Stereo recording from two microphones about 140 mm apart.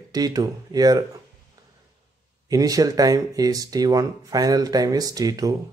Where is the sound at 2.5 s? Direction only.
25° right (ahead or behind).